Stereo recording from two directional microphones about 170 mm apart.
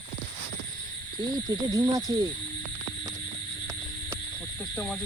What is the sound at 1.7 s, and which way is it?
Speech, 20° right (ahead or behind).